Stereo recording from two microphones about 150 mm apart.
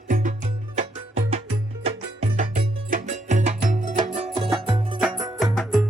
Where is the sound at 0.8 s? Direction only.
45° right (ahead or behind).